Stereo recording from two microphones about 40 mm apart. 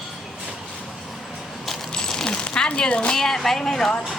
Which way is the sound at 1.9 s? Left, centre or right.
Centre.